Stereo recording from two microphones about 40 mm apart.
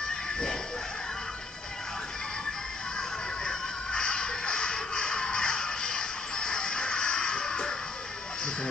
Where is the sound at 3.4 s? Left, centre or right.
Centre.